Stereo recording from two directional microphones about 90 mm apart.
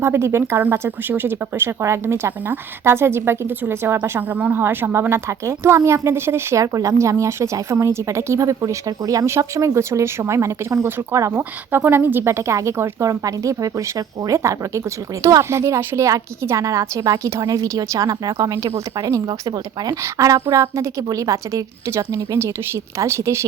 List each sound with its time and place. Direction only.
0.0 s speech: 30° right (ahead or behind)
4.4 s speech: 15° right (ahead or behind); by 18.5 s 40° right (ahead or behind)
18.5 s speech: 30° right (ahead or behind)
18.9 s a woman's voice: 45° right (ahead or behind)